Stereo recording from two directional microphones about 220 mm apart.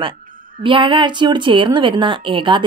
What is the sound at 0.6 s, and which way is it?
A woman's voice, 20° right (ahead or behind).